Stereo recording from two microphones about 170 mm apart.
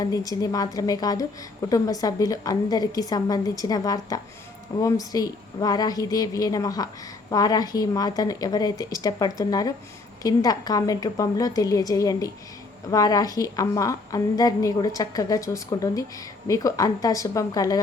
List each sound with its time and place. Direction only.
0.0 s a woman's voice: 20° left (ahead or behind)